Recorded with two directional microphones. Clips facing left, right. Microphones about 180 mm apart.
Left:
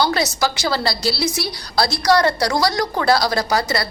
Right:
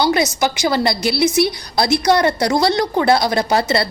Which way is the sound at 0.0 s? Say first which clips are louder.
Right 3 dB; 20° right (ahead or behind).